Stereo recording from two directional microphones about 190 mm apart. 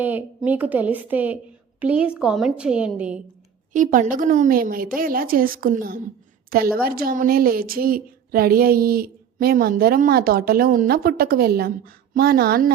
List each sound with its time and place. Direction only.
0.0 s a woman's voice: 10° right (ahead or behind)
3.7 s speech: 40° right (ahead or behind)